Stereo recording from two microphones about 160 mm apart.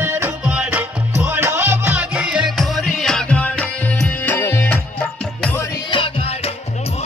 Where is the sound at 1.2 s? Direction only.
15° right (ahead or behind); by 4.8 s 15° left (ahead or behind).